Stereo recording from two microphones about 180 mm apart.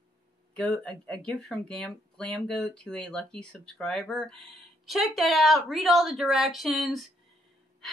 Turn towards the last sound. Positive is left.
turn(degrees=0)  # may be behind; listen again after turning